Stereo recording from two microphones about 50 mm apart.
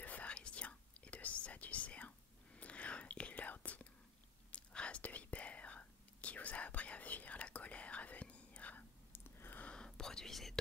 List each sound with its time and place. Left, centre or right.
0.0 s whispering: left
9.1 s a sound: left
9.8 s whispering: centre